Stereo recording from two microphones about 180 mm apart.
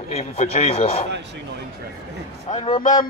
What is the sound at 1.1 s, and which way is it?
Speech, 75° right (ahead or behind).